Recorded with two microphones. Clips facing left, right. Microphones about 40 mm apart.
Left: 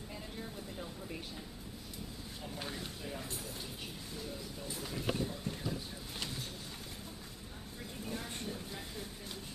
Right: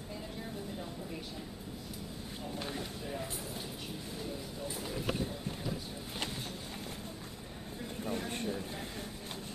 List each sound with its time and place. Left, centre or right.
2.6 s speech: centre
8.0 s speech: right